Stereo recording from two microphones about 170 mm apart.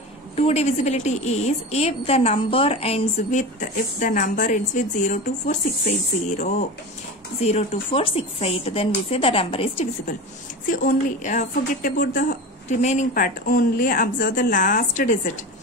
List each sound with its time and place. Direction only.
0.4 s a woman's voice: 40° left (ahead or behind)
10.7 s a woman's voice: 50° left (ahead or behind)